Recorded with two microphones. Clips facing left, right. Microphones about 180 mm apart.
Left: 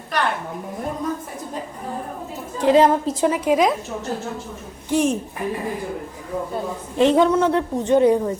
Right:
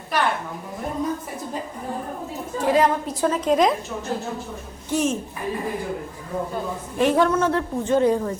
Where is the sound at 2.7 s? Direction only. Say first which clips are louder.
Left 5 dB; 25° left (ahead or behind).